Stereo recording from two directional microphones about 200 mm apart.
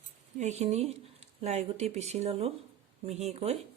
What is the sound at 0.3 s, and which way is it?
Speech, 35° right (ahead or behind).